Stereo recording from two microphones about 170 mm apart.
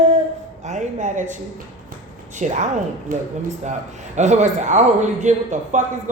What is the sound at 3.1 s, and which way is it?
Speech, 55° right (ahead or behind).